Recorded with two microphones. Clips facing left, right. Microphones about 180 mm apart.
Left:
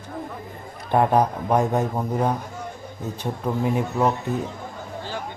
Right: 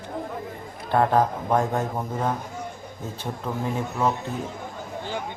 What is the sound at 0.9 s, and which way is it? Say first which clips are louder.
A man's voice: left 2 dB; 15° left (ahead or behind).